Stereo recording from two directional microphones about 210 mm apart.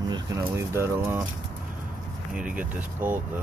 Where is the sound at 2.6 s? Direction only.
5° right (ahead or behind).